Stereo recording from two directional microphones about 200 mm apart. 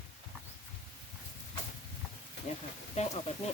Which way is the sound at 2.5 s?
35° left (ahead or behind).